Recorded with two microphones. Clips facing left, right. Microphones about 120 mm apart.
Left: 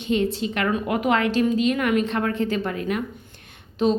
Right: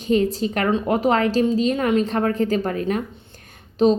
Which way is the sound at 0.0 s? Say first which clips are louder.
Right 3 dB; 40° right (ahead or behind).